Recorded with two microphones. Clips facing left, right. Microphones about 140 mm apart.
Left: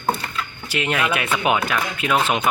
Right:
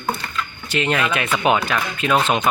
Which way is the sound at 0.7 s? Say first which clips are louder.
Right 2 dB; 10° left (ahead or behind).